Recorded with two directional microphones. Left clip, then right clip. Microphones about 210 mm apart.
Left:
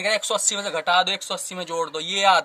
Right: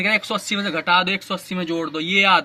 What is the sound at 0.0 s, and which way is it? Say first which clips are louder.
Speech: right 2 dB; 50° left (ahead or behind).